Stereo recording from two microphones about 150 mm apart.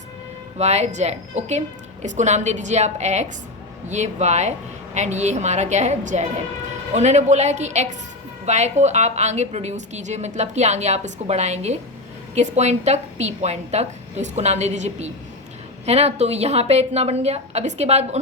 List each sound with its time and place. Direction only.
0.6 s a woman's voice: 45° right (ahead or behind)